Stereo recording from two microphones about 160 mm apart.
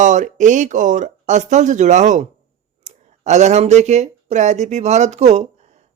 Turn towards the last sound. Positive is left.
turn(degrees=-45)  # may be behind; listen again after turning